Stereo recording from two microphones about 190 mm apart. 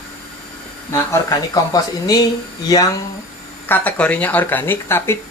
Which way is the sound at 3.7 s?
5° left (ahead or behind).